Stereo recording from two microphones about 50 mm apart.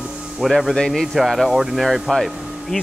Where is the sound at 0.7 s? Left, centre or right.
Centre.